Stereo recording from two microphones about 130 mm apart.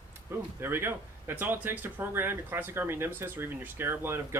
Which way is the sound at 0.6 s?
15° right (ahead or behind).